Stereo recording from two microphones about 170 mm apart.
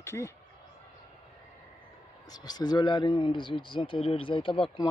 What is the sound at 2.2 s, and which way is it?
Speech, 25° left (ahead or behind).